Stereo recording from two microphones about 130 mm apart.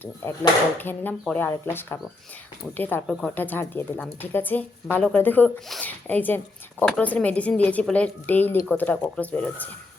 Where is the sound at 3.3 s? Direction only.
15° left (ahead or behind).